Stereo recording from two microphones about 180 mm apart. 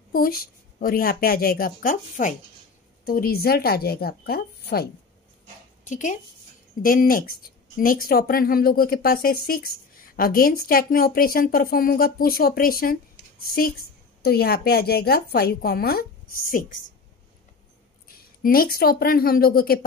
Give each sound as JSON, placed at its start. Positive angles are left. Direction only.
{"t": 0.1, "sound": "a woman's voice", "side_deg": 55}
{"t": 5.9, "sound": "a woman's voice", "side_deg": 45}
{"t": 18.0, "sound": "a woman's voice", "side_deg": 55}